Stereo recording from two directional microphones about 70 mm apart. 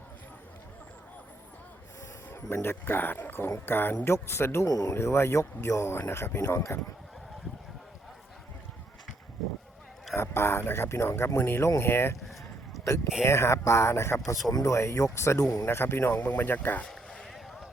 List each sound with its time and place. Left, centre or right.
2.3 s speech: left
4.6 s speech: left
4.9 s speech: left
9.4 s a sound: centre
10.2 s speech: left
13.2 s speech: left
14.4 s speech: left
16.1 s speech: left
16.8 s a sound: centre